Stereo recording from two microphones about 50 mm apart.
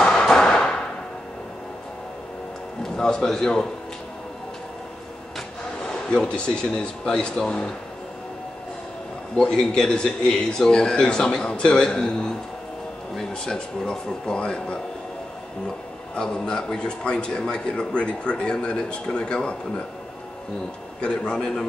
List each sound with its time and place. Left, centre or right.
0.0 s a sound: centre
2.8 s a man's voice: centre
5.9 s a man's voice: centre
9.4 s a man's voice: centre
16.2 s speech: centre
21.0 s a man's voice: centre